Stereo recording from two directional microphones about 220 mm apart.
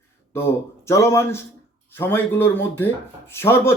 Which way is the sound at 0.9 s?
10° left (ahead or behind).